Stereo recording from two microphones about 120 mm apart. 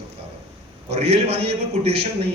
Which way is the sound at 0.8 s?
60° right (ahead or behind).